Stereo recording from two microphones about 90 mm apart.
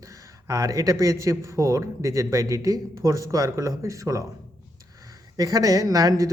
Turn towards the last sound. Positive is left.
turn(degrees=-40)  # may be behind; listen again after turning